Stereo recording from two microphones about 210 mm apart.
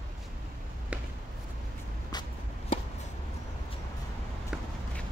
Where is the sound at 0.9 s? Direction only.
5° right (ahead or behind).